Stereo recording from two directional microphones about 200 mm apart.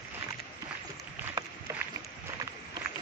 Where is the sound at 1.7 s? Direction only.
15° right (ahead or behind).